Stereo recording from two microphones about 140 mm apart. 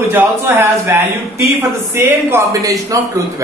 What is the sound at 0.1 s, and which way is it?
Speech, 15° right (ahead or behind).